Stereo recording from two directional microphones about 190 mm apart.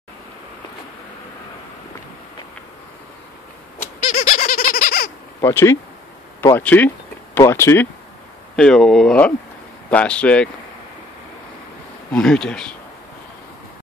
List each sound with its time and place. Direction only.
3.8 s goat: 30° left (ahead or behind)
4.4 s a sound: 50° left (ahead or behind)
5.4 s speech: 15° left (ahead or behind)
12.1 s speech: 5° left (ahead or behind)